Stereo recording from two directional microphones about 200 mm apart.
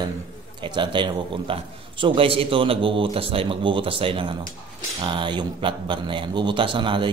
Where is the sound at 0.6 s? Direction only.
25° right (ahead or behind).